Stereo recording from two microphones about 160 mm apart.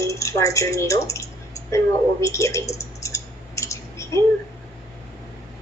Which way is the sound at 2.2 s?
20° left (ahead or behind).